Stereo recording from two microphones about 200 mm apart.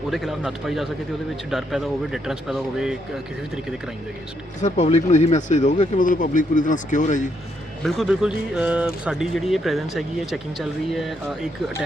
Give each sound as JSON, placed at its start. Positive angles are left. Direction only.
{"t": 0.1, "sound": "speech", "side_deg": 0}
{"t": 4.6, "sound": "speech", "side_deg": 35}
{"t": 7.9, "sound": "speech", "side_deg": 0}